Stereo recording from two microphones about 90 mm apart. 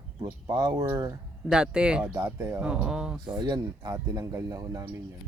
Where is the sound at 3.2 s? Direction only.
50° right (ahead or behind).